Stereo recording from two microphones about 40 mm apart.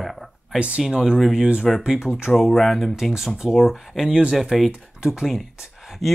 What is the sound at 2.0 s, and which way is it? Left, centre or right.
Speech, centre.